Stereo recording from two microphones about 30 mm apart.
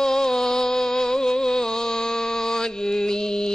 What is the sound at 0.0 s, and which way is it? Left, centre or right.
Music, centre.